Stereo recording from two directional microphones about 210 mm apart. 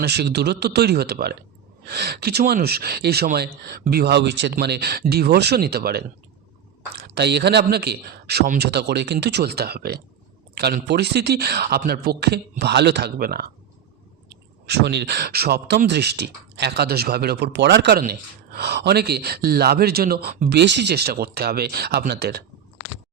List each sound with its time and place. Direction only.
0.0 s speech: 50° right (ahead or behind)
7.1 s speech: 50° right (ahead or behind)
20.6 s speech: 55° right (ahead or behind)